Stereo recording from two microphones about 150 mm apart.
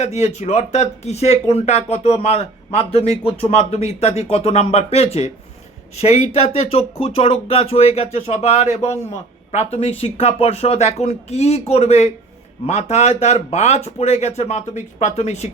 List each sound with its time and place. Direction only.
0.0 s speech: 45° left (ahead or behind)